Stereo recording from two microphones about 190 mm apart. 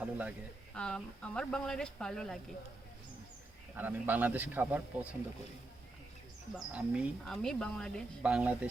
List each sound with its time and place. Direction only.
0.0 s a woman's voice: 5° right (ahead or behind)
0.7 s a woman's voice: 5° left (ahead or behind)
3.8 s speech: 10° right (ahead or behind)
6.7 s a woman's voice: 5° right (ahead or behind)